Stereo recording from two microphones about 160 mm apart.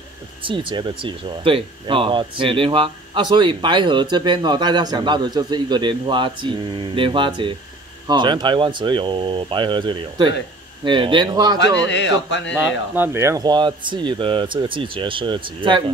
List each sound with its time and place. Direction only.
0.4 s speech: 30° right (ahead or behind)
11.6 s speech: 90° left
12.5 s speech: 10° right (ahead or behind); by 15.8 s 30° right (ahead or behind)